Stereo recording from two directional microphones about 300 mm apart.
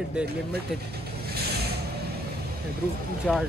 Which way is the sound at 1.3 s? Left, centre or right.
Right.